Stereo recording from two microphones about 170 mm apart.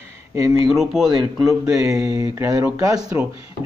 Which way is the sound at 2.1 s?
20° right (ahead or behind).